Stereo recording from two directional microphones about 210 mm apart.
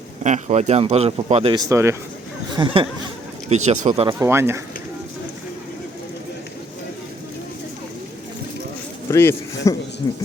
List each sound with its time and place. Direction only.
0.2 s a man's voice: 35° right (ahead or behind)
1.5 s speech: 15° right (ahead or behind)
2.6 s a man's voice: 25° right (ahead or behind)
4.2 s speech: 10° right (ahead or behind)
9.0 s a man's voice: 15° left (ahead or behind)